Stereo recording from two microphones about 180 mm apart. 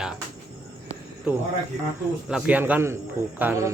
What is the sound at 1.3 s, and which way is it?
Speech, 10° right (ahead or behind).